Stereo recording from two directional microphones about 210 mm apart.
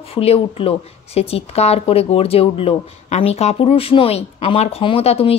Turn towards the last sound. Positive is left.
turn(degrees=30)  # may be behind; listen again after turning